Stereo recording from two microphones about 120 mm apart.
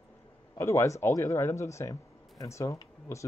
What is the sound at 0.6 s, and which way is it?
Speech, 25° left (ahead or behind).